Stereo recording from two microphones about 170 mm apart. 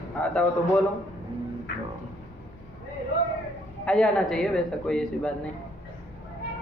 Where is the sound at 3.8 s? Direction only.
5° left (ahead or behind).